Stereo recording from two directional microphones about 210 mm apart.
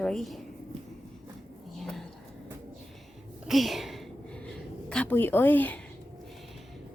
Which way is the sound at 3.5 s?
Centre (ahead or behind).